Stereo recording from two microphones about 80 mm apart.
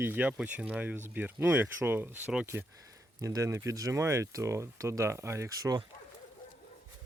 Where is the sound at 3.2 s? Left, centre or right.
Right.